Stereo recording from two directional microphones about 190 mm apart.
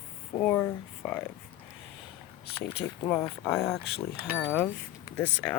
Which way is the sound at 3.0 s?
10° left (ahead or behind).